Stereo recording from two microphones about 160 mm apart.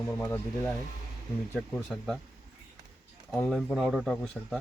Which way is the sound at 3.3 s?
Centre (ahead or behind).